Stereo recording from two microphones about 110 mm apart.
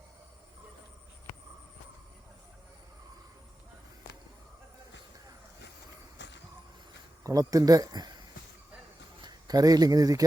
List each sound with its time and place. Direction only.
7.3 s speech: 35° right (ahead or behind)
9.2 s speech: 35° right (ahead or behind)